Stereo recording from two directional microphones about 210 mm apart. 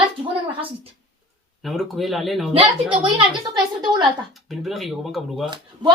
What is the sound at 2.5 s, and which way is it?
Speech, 25° right (ahead or behind).